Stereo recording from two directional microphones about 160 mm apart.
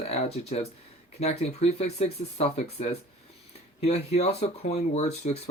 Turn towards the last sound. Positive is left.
turn(degrees=45)  # may be behind; listen again after turning